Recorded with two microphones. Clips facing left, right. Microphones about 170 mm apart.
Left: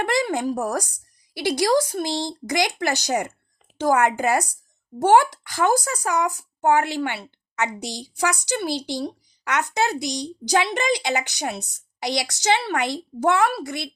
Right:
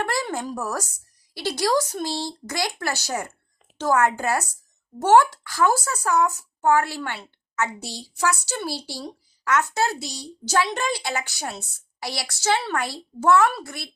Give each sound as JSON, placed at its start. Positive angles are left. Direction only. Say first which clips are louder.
{"t": 0.0, "sound": "a woman's voice", "louder": "left 4 dB", "side_deg": 15}